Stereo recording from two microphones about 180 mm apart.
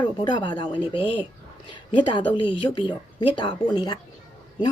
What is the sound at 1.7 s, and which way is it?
A woman's voice, 25° left (ahead or behind).